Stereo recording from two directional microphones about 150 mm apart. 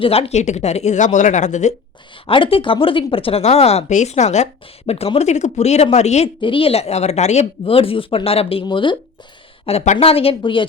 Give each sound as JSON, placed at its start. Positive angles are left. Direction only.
{"t": 0.0, "sound": "speech", "side_deg": 40}
{"t": 2.2, "sound": "speech", "side_deg": 35}
{"t": 6.4, "sound": "speech", "side_deg": 35}
{"t": 9.6, "sound": "speech", "side_deg": 50}